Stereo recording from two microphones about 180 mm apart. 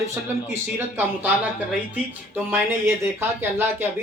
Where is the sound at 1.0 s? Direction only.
10° right (ahead or behind).